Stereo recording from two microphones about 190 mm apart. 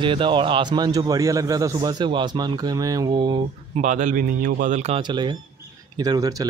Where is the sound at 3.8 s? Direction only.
40° right (ahead or behind).